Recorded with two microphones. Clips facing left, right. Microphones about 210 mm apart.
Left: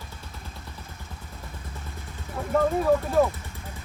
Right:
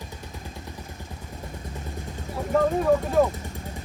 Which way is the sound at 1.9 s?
45° right (ahead or behind).